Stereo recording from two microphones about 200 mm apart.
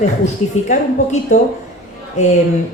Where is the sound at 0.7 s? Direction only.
40° left (ahead or behind).